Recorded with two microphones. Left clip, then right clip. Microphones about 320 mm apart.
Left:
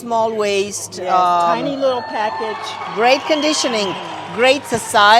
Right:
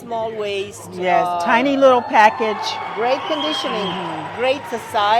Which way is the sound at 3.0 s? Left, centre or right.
Left.